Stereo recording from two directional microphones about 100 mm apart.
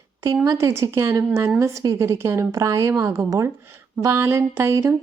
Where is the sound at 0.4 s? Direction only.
30° right (ahead or behind).